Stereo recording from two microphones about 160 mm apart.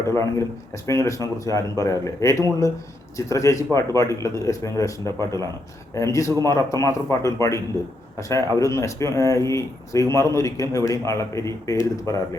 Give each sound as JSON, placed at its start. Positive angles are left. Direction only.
{"t": 0.1, "sound": "speech", "side_deg": 20}